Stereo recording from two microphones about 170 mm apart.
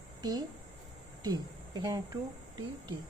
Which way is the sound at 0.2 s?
25° right (ahead or behind).